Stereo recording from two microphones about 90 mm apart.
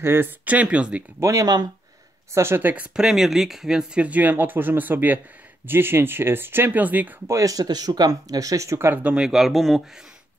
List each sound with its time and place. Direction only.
0.0 s speech: 25° right (ahead or behind)
1.2 s speech: 40° right (ahead or behind)
2.3 s speech: 30° right (ahead or behind)
2.7 s speech: 10° right (ahead or behind)
7.2 s speech: 40° right (ahead or behind)
9.0 s speech: 10° right (ahead or behind)